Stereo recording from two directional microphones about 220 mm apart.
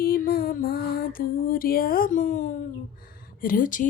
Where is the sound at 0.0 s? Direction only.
40° left (ahead or behind).